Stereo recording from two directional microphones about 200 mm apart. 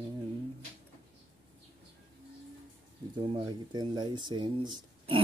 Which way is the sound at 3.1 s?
20° right (ahead or behind).